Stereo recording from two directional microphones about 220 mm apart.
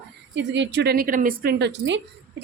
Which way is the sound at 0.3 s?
55° right (ahead or behind).